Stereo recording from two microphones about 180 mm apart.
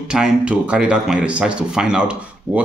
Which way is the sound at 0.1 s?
5° right (ahead or behind).